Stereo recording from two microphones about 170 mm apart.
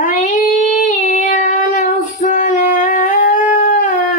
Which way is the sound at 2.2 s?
45° left (ahead or behind).